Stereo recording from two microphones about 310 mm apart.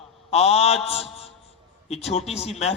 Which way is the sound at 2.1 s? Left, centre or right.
Centre.